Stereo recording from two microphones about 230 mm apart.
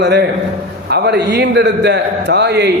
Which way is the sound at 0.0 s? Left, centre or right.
Right.